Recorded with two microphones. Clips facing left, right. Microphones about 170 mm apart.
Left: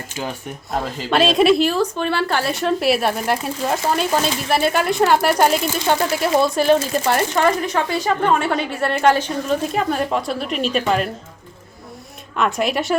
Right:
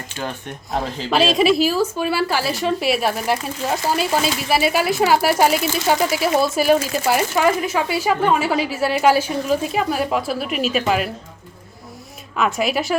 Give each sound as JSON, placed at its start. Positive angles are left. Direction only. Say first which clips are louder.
{"t": 0.2, "sound": "speech", "louder": "left 1 dB", "side_deg": 5}
{"t": 12.4, "sound": "speech", "louder": "even", "side_deg": 0}